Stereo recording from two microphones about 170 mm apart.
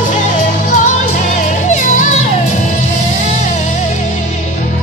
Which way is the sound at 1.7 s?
50° left (ahead or behind).